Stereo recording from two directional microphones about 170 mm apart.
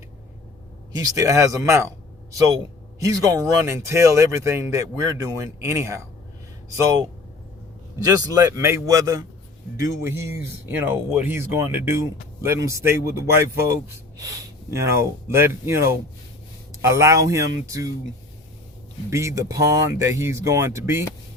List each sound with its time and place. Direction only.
0.9 s a man's voice: 20° right (ahead or behind)
19.1 s speech: 15° right (ahead or behind)